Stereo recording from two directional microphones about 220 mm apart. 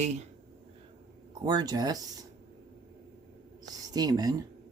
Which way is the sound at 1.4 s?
20° right (ahead or behind).